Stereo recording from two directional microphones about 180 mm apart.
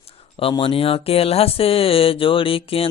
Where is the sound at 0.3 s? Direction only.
30° left (ahead or behind).